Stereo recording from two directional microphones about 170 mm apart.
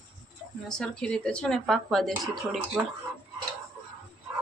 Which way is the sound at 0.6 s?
5° left (ahead or behind).